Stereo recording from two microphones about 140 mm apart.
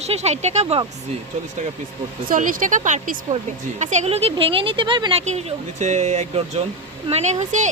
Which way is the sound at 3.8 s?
55° right (ahead or behind).